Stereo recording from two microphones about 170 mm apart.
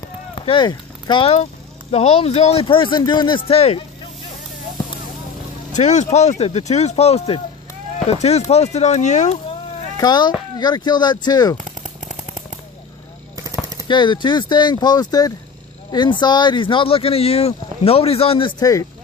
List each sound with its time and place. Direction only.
0.3 s a man's voice: 30° left (ahead or behind)
5.7 s a man's voice: 45° left (ahead or behind)
10.0 s speech: 25° left (ahead or behind)
11.5 s a sound: 50° right (ahead or behind)
13.8 s a man's voice: 25° left (ahead or behind)